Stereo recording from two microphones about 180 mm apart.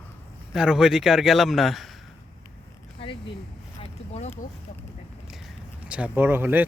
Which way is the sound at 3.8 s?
35° left (ahead or behind).